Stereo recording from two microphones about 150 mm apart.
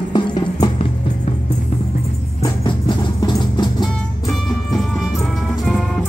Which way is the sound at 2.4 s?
30° left (ahead or behind).